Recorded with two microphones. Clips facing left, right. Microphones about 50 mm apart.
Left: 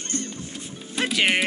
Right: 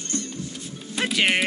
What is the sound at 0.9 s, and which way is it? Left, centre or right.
Music, centre.